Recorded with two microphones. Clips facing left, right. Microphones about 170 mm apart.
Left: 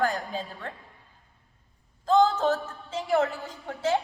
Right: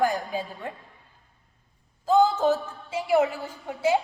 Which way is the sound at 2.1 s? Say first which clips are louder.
Right 1 dB; 5° right (ahead or behind).